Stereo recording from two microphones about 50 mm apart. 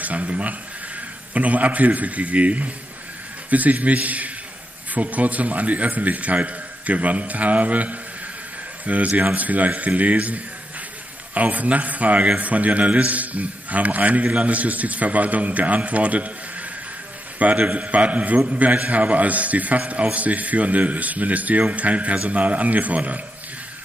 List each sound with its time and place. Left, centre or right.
0.0 s a man's voice: right
17.4 s a man's voice: right